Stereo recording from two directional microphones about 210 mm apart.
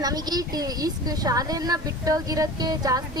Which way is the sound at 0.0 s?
20° right (ahead or behind).